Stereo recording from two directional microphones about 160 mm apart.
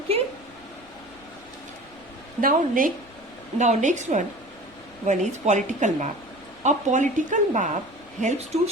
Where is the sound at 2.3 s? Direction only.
60° right (ahead or behind).